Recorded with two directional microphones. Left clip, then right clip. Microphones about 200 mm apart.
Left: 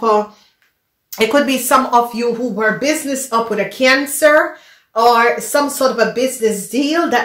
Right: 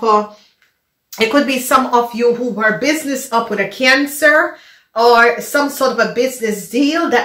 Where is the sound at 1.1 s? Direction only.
50° left (ahead or behind).